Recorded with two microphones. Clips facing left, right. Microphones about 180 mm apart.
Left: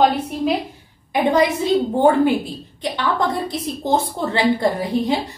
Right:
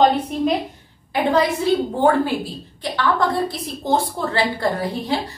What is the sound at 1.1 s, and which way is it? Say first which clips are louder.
A woman's voice: left 2 dB; 20° left (ahead or behind).